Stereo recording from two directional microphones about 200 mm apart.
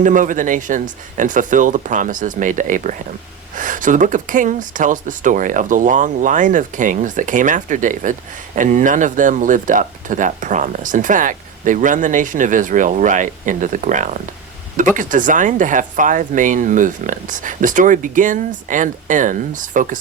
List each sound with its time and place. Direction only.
0.0 s speech: 40° right (ahead or behind)